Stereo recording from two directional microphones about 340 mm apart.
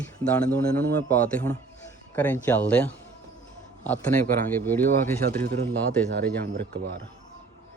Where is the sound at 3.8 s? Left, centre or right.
Centre.